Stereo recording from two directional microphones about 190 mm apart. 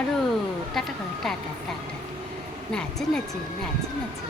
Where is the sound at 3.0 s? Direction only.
Centre (ahead or behind).